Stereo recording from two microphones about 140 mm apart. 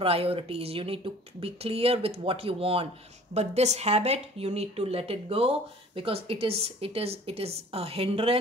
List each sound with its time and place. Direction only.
0.0 s speech: 45° right (ahead or behind)